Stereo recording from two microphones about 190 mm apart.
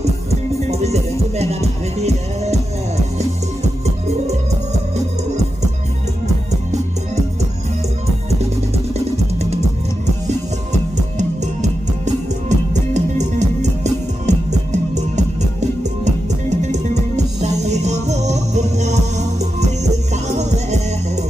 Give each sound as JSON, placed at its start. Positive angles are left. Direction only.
{"t": 0.0, "sound": "music", "side_deg": -35}
{"t": 9.4, "sound": "music", "side_deg": -35}
{"t": 10.9, "sound": "music", "side_deg": -40}
{"t": 20.2, "sound": "music", "side_deg": -35}